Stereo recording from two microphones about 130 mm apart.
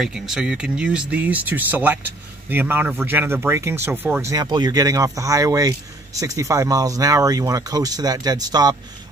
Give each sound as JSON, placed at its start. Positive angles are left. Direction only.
{"t": 0.0, "sound": "speech", "side_deg": -5}